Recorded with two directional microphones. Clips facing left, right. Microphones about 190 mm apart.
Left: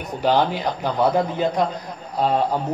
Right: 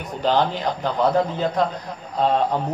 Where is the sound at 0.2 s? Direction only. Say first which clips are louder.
Left 1 dB; 10° left (ahead or behind).